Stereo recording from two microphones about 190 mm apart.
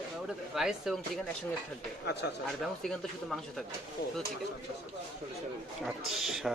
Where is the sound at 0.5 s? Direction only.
5° right (ahead or behind).